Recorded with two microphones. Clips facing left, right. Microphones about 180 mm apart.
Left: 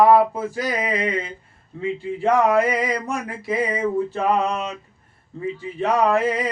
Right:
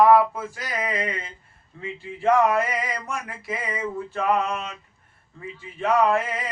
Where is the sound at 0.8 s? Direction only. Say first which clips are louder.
Left 1 dB; 20° left (ahead or behind).